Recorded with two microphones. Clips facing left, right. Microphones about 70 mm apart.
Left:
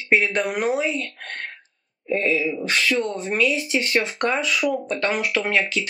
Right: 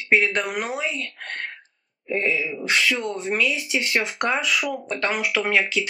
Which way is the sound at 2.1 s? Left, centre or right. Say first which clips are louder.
Left 3 dB; centre.